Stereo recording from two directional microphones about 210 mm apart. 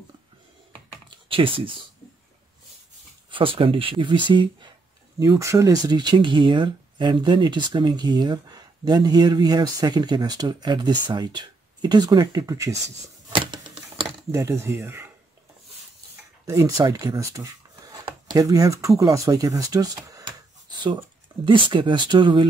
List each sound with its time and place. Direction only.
0.7 s computer keyboard: 25° right (ahead or behind)
3.3 s speech: 25° right (ahead or behind)
13.3 s a sound: 25° right (ahead or behind)
14.3 s speech: 15° right (ahead or behind)
16.4 s speech: 15° right (ahead or behind)